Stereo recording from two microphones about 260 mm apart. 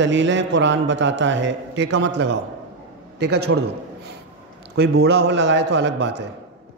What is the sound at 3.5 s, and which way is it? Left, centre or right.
Speech, right.